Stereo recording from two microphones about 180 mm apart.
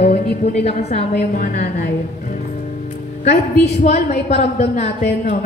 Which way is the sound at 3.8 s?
40° left (ahead or behind).